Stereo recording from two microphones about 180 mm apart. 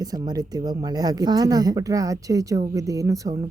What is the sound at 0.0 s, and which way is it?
Speech, 20° right (ahead or behind).